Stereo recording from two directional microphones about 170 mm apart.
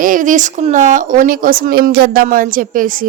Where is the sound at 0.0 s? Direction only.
50° right (ahead or behind).